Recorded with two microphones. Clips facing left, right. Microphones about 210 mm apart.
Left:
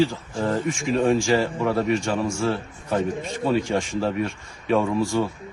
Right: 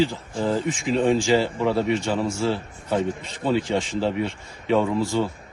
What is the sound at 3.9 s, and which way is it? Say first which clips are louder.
Speech: even; 15° right (ahead or behind).